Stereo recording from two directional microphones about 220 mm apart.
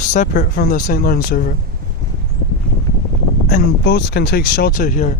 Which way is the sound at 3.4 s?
45° left (ahead or behind).